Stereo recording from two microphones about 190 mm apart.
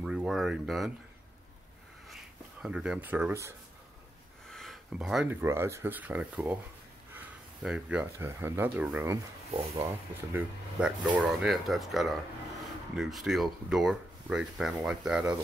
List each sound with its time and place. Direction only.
0.0 s speech: 5° right (ahead or behind)
2.6 s speech: 5° right (ahead or behind)
4.5 s speech: centre (ahead or behind)
7.6 s speech: 5° right (ahead or behind)